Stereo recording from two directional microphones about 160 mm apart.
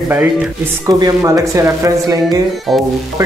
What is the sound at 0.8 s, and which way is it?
Speech, 25° right (ahead or behind).